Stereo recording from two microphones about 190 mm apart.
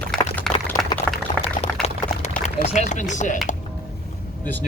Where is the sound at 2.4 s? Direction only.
40° left (ahead or behind).